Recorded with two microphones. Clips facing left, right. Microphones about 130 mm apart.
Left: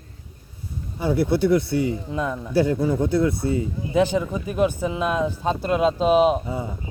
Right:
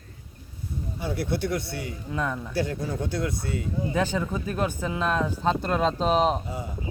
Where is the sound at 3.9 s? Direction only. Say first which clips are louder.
Left 8 dB; 15° left (ahead or behind).